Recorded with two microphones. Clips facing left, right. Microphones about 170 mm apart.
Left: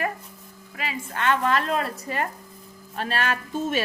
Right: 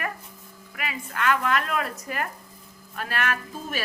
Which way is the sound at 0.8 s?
25° left (ahead or behind).